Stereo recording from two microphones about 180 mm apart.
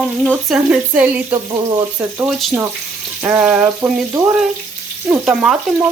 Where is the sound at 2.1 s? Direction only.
5° right (ahead or behind).